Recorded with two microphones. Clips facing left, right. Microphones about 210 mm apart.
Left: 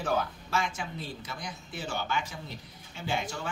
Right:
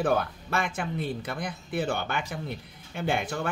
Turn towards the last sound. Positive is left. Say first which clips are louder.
# right 5 dB
turn(degrees=-55)  # may be behind; listen again after turning